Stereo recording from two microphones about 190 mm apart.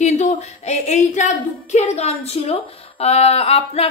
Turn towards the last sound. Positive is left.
turn(degrees=30)  # may be behind; listen again after turning